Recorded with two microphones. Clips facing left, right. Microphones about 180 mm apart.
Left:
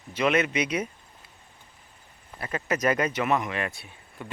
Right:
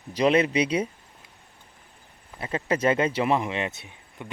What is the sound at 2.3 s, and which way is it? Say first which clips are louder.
Speech: right 2 dB; 25° right (ahead or behind).